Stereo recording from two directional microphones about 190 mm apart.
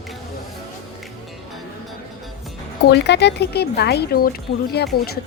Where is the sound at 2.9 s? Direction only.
65° left (ahead or behind).